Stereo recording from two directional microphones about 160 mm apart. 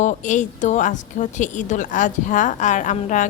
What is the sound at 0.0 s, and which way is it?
A woman's voice, 50° left (ahead or behind).